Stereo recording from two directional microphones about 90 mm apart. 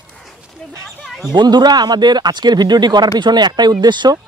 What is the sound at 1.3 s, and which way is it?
Speech, 55° right (ahead or behind).